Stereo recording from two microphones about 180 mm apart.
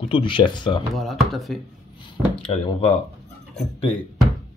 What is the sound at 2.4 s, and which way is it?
Speech, 30° left (ahead or behind).